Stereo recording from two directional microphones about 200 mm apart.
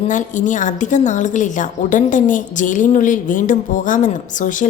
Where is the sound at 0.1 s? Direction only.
40° left (ahead or behind).